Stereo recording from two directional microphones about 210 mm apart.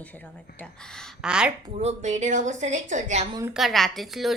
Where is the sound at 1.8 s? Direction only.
35° right (ahead or behind).